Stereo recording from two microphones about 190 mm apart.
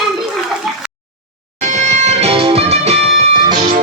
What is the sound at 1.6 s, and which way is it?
Music, 40° right (ahead or behind).